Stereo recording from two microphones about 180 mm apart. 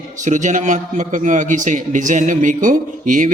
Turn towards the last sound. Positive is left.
turn(degrees=-45)  # may be behind; listen again after turning